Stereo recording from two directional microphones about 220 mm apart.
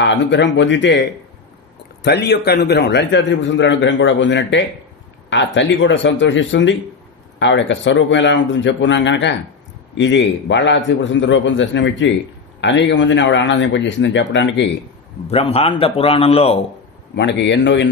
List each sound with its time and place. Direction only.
0.0 s a man's voice: 55° left (ahead or behind)
2.0 s a man's voice: 50° left (ahead or behind)
15.2 s a man's voice: 25° left (ahead or behind)
17.1 s a man's voice: 50° left (ahead or behind)